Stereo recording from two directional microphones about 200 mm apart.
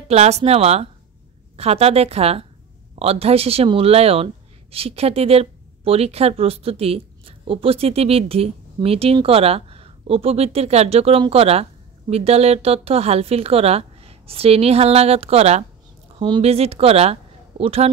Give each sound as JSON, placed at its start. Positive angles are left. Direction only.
{"t": 0.1, "sound": "speech", "side_deg": -35}